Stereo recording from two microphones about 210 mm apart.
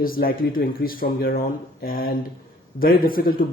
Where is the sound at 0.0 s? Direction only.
45° left (ahead or behind).